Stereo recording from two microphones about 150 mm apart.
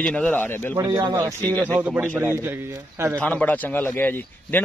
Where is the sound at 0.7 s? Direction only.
25° right (ahead or behind).